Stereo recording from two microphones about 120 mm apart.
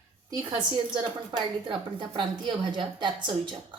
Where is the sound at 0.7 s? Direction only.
45° right (ahead or behind).